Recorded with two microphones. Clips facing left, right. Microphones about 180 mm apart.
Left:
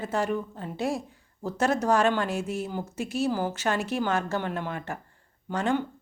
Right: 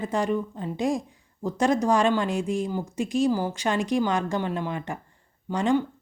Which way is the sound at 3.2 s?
15° right (ahead or behind).